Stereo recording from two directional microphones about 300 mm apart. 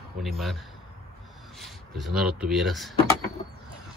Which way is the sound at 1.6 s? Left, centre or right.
Centre.